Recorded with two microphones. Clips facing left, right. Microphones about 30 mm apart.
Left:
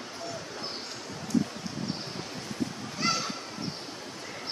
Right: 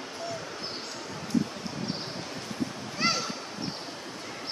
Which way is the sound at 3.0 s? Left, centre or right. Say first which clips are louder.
Right 1 dB; right.